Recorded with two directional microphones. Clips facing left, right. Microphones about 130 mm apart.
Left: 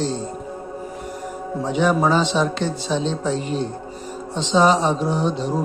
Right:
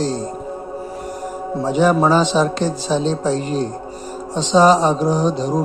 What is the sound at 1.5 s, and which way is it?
A man's voice, 40° right (ahead or behind).